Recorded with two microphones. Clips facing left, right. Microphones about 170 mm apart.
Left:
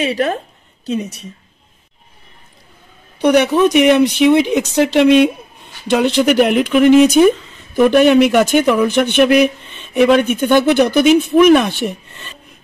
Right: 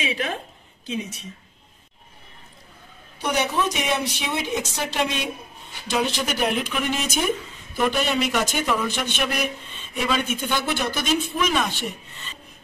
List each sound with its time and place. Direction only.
0.0 s a woman's voice: 45° left (ahead or behind)
3.2 s a man's voice: 70° left (ahead or behind)